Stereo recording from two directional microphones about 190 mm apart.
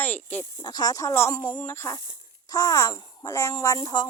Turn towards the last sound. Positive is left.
turn(degrees=25)  # may be behind; listen again after turning